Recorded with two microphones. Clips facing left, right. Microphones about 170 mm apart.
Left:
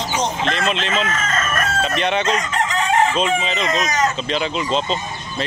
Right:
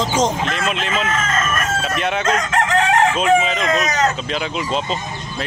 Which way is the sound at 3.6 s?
60° right (ahead or behind).